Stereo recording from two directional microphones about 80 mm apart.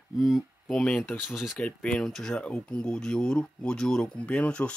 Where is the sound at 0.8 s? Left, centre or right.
Centre.